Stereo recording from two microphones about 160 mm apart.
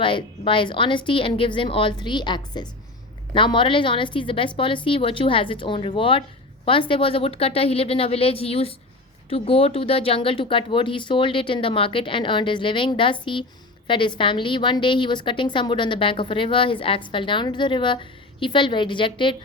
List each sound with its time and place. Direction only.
0.0 s a woman's voice: 30° left (ahead or behind)